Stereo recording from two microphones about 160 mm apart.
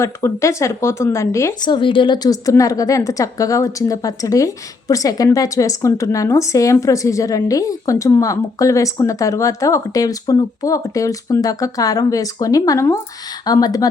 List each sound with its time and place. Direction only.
0.0 s speech: 20° left (ahead or behind)
1.7 s a woman's voice: 30° left (ahead or behind)